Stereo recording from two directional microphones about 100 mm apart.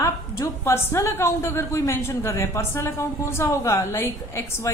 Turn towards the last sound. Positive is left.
turn(degrees=30)  # may be behind; listen again after turning